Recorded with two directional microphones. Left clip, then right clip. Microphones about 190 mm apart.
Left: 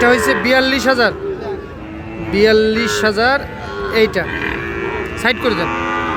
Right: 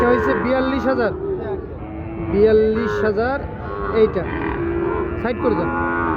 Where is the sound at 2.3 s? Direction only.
5° left (ahead or behind).